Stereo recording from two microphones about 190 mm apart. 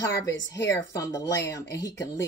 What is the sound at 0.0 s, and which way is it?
Speech, 15° left (ahead or behind).